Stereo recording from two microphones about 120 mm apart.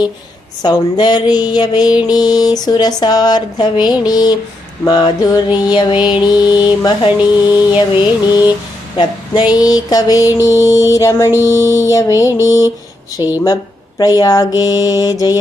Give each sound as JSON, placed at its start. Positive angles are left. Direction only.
{"t": 0.6, "sound": "music", "side_deg": 35}
{"t": 10.4, "sound": "mantra", "side_deg": 25}
{"t": 13.2, "sound": "music", "side_deg": 40}